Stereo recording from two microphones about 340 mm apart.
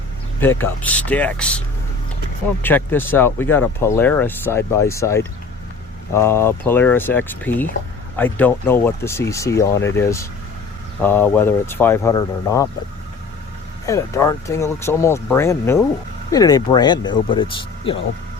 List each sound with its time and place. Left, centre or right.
0.3 s speech: centre
2.6 s speech: centre
13.8 s speech: centre